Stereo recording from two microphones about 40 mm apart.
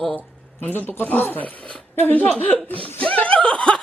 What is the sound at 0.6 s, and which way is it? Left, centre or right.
Speech, left.